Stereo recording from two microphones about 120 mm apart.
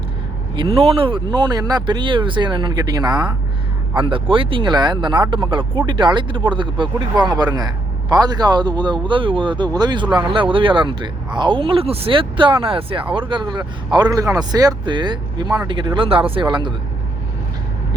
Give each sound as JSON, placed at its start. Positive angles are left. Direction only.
{"t": 0.5, "sound": "speech", "side_deg": -45}